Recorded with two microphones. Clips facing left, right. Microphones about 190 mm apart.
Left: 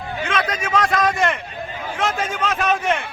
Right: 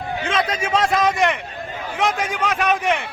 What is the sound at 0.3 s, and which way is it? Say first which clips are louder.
A man's voice: right 2 dB; 25° right (ahead or behind).